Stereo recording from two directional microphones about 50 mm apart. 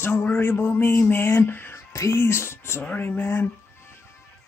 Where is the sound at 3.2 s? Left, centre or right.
Left.